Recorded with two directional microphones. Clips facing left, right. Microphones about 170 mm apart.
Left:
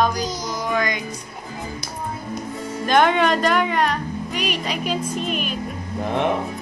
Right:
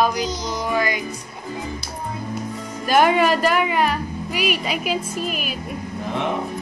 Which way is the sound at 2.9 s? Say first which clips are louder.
Right 1 dB; 5° right (ahead or behind).